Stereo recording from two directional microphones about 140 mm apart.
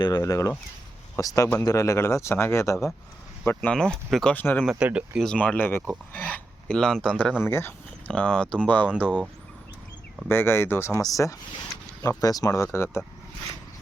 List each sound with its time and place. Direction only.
0.0 s speech: 25° left (ahead or behind)
4.6 s speech: 5° right (ahead or behind)
5.2 s speech: 5° left (ahead or behind)
7.4 s speech: 15° left (ahead or behind)
10.2 s speech: 15° left (ahead or behind)